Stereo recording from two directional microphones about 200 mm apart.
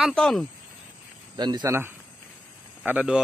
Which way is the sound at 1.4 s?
20° right (ahead or behind).